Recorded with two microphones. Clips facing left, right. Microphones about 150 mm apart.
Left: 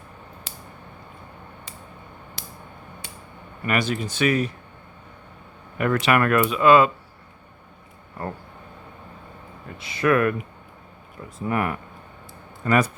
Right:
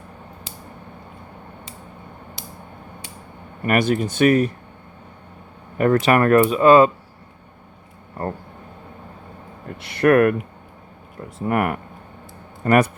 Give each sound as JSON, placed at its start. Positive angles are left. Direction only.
{"t": 3.7, "sound": "speech", "side_deg": -50}
{"t": 5.7, "sound": "speech", "side_deg": -40}
{"t": 9.6, "sound": "speech", "side_deg": -65}